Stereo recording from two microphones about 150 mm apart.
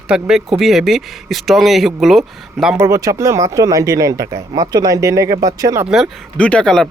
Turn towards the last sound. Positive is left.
turn(degrees=5)  # may be behind; listen again after turning